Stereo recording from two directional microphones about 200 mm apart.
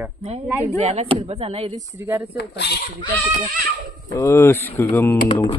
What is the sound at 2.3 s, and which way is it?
Speech, 55° left (ahead or behind).